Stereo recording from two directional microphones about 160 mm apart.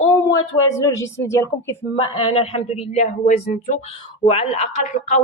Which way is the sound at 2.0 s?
35° left (ahead or behind).